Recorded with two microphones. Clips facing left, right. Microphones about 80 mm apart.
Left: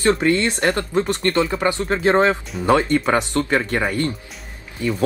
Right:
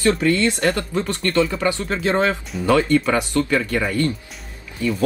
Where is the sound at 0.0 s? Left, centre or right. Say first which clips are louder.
Even; left.